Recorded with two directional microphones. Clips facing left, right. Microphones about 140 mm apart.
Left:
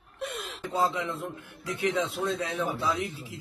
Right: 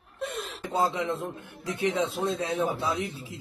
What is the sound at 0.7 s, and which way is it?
A man's voice, 30° right (ahead or behind).